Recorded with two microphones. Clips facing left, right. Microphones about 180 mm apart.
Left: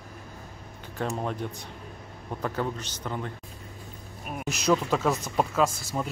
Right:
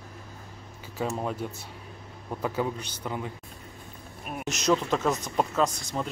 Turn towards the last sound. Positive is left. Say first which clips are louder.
# left 1 dB
turn(degrees=5)  # may be behind; listen again after turning